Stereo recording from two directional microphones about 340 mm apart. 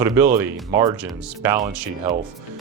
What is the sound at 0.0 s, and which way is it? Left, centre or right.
Speech, centre.